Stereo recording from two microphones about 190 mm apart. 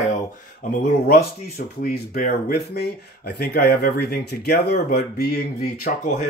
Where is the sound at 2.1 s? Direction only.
45° left (ahead or behind).